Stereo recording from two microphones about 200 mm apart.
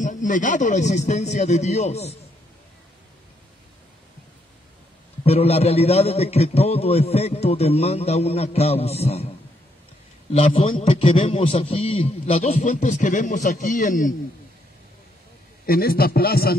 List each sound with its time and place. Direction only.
0.0 s a man's voice: 40° left (ahead or behind)
5.2 s a man's voice: 30° left (ahead or behind)
10.3 s a man's voice: 25° left (ahead or behind)
15.6 s a man's voice: 50° left (ahead or behind)